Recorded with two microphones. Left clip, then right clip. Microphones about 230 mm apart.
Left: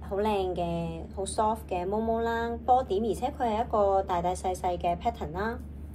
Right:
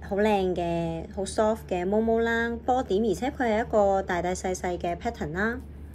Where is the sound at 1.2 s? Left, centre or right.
Right.